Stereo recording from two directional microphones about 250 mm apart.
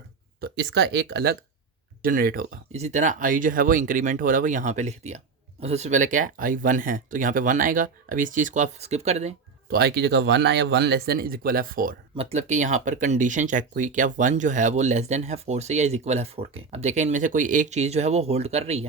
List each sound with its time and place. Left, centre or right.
0.3 s speech: right